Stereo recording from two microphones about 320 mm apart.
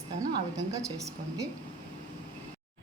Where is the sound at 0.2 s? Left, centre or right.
Centre.